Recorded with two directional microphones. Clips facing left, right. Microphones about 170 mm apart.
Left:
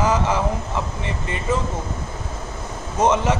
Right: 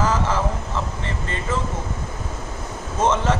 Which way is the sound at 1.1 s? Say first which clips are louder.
Left 1 dB; 15° left (ahead or behind).